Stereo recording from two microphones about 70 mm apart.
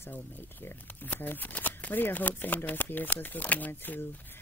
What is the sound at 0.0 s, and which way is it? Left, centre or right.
Speech, left.